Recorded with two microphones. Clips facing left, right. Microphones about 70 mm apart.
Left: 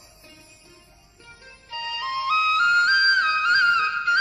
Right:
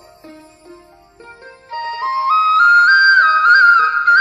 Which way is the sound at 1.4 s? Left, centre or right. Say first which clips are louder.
Right 9 dB; right.